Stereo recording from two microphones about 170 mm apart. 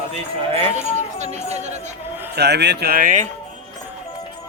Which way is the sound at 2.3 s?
75° right (ahead or behind).